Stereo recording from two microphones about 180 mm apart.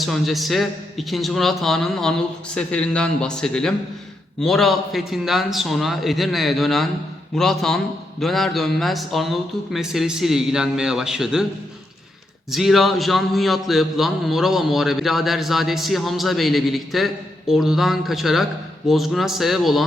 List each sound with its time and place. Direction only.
0.0 s a man's voice: centre (ahead or behind)
12.5 s a man's voice: centre (ahead or behind)